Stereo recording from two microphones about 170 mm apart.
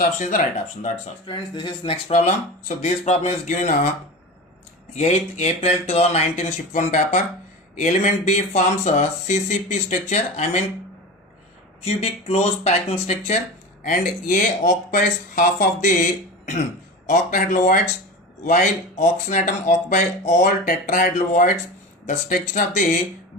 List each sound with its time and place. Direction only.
0.2 s speech: 45° left (ahead or behind)
1.3 s speech: 30° left (ahead or behind); by 3.8 s 45° left (ahead or behind)
4.9 s speech: 40° left (ahead or behind)
11.9 s speech: 35° left (ahead or behind)
13.8 s speech: 50° left (ahead or behind)
17.1 s speech: 50° left (ahead or behind)